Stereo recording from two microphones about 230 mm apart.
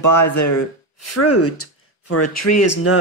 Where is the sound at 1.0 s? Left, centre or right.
Left.